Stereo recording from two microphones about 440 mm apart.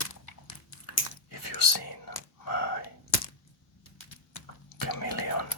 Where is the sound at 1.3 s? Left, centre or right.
Left.